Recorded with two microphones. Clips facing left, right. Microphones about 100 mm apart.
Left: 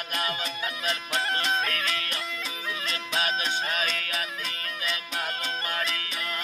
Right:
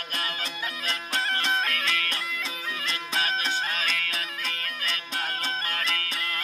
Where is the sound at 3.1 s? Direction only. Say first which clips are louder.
Even; 20° left (ahead or behind).